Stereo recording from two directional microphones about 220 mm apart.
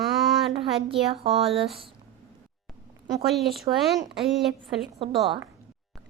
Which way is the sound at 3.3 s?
Centre (ahead or behind).